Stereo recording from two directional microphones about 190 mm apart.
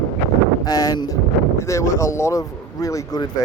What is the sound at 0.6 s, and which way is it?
Speech, 20° left (ahead or behind).